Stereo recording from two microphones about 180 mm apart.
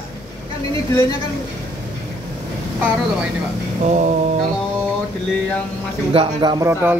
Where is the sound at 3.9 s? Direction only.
45° right (ahead or behind).